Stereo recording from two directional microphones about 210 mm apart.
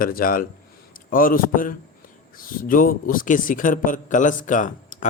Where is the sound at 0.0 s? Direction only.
45° left (ahead or behind).